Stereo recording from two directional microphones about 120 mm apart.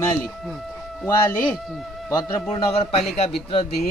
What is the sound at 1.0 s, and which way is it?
Speech, 25° left (ahead or behind).